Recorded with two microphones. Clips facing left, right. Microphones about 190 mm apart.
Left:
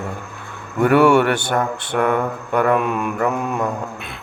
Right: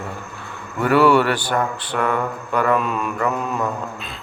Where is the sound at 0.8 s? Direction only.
55° left (ahead or behind).